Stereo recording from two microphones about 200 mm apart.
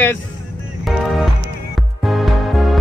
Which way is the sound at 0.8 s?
Centre (ahead or behind).